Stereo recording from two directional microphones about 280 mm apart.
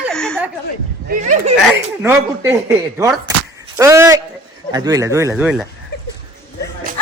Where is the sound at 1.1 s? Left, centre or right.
Right.